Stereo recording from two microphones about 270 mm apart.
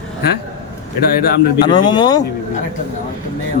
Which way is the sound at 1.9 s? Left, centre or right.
Centre.